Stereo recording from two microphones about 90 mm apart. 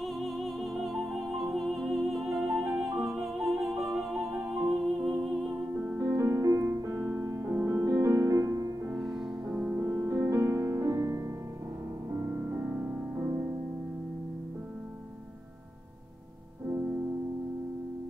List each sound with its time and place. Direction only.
0.0 s music: centre (ahead or behind)
5.8 s music: 25° right (ahead or behind)
8.9 s music: 5° right (ahead or behind)
9.5 s music: 15° right (ahead or behind)
9.8 s music: 30° right (ahead or behind)